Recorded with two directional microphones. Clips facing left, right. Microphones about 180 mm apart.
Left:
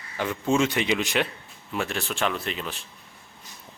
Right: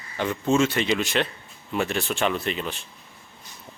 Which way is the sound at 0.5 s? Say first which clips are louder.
Right 1 dB; 15° left (ahead or behind).